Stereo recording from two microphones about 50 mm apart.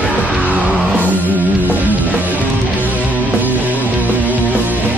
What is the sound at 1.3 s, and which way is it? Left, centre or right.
Music, right.